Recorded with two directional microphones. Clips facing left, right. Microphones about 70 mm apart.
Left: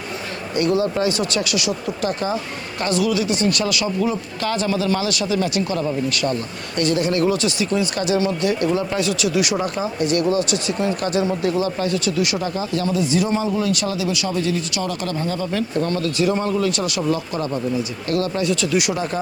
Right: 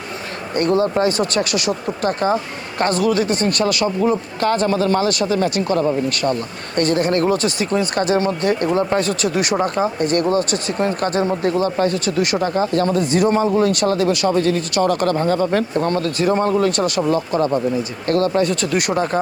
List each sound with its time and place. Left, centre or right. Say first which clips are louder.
0.5 s speech: right 2 dB; right